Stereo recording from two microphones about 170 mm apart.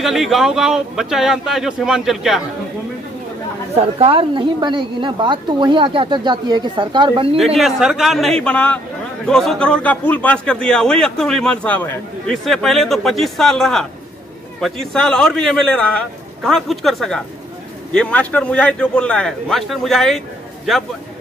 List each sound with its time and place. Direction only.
0.0 s a man's voice: centre (ahead or behind)
3.7 s a woman's voice: 35° right (ahead or behind)
7.3 s a man's voice: centre (ahead or behind)